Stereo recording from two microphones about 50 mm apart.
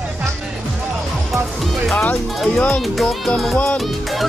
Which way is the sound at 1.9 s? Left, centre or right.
Left.